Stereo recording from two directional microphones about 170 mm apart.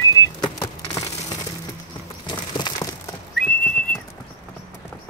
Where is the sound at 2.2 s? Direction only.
25° left (ahead or behind).